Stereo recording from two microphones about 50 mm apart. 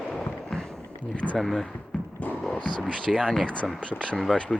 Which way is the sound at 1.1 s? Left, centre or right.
Left.